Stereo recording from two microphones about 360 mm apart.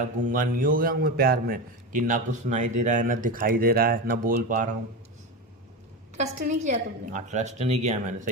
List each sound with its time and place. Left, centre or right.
0.0 s a man's voice: right
6.1 s a man's voice: centre